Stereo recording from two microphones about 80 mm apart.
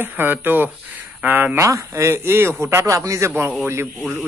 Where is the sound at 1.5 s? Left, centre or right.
Right.